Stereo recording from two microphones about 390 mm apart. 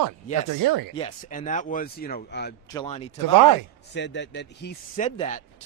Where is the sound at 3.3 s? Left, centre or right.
Right.